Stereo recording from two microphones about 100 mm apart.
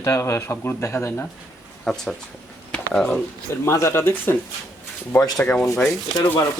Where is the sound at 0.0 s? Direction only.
30° left (ahead or behind).